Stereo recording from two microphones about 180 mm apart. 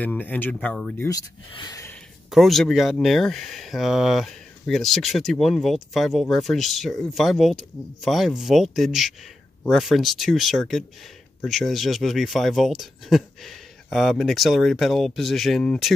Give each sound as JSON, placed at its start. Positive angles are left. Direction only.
{"t": 0.0, "sound": "speech", "side_deg": 10}
{"t": 0.9, "sound": "speech", "side_deg": 15}
{"t": 1.5, "sound": "a sound", "side_deg": 20}
{"t": 2.3, "sound": "speech", "side_deg": 0}